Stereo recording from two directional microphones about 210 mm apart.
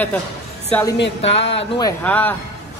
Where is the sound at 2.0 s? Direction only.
10° left (ahead or behind).